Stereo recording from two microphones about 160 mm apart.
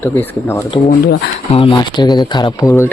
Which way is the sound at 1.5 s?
35° left (ahead or behind).